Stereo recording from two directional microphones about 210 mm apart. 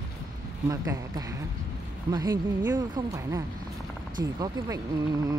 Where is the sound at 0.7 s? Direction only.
15° right (ahead or behind).